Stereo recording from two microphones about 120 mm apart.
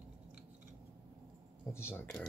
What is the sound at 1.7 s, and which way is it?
Speech, 20° left (ahead or behind).